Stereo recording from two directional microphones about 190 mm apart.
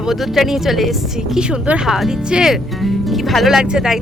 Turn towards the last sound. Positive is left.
turn(degrees=-5)  # may be behind; listen again after turning